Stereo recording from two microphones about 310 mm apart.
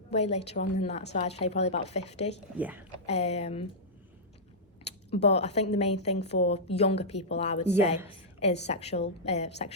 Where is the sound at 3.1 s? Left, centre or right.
Centre.